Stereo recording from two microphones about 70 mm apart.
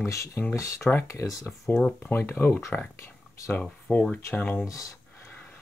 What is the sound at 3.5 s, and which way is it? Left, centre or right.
Speech, left.